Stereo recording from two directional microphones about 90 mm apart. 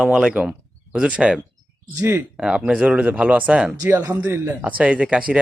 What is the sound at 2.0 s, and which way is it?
Speech, 30° right (ahead or behind).